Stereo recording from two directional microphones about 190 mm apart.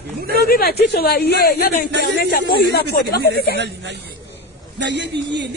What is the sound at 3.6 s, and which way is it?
A man's voice, 65° right (ahead or behind).